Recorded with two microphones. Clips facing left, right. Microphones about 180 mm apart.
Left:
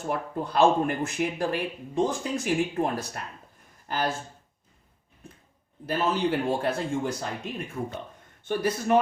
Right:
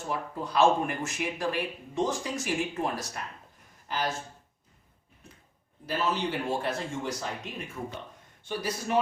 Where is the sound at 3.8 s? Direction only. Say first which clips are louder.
Left 3 dB; 55° left (ahead or behind).